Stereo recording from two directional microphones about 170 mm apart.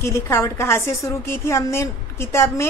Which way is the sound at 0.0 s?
15° left (ahead or behind).